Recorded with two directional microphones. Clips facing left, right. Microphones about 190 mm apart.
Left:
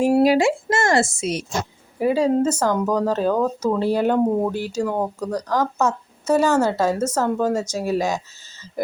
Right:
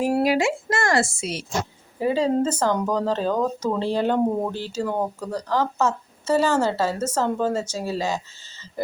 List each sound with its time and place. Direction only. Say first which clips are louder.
0.0 s a woman's voice: left 4 dB; 25° left (ahead or behind)